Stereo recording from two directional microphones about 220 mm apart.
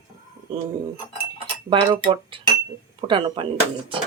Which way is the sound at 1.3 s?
25° right (ahead or behind).